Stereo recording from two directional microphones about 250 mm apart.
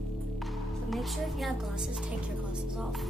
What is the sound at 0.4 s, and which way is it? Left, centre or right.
A woman's voice, centre.